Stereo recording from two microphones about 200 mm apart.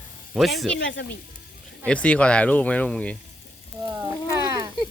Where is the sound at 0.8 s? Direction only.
65° left (ahead or behind).